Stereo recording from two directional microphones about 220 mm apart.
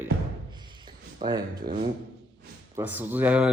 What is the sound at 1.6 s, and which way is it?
Speech, 35° right (ahead or behind).